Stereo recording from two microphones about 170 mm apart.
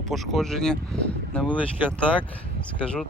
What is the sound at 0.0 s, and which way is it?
Speech, centre (ahead or behind).